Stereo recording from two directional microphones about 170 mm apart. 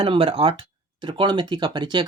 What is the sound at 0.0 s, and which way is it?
Speech, 30° right (ahead or behind).